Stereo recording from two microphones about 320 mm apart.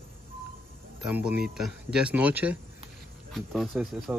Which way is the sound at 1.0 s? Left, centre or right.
Centre.